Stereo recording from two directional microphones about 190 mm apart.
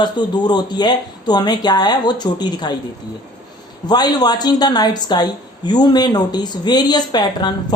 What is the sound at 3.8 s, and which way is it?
Speech, 20° left (ahead or behind).